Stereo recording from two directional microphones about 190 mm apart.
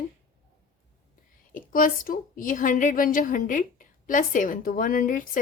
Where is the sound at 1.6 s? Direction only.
45° left (ahead or behind).